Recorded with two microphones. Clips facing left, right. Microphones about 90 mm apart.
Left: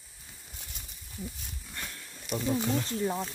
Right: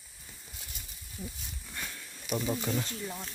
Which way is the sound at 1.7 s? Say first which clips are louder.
Even; centre (ahead or behind).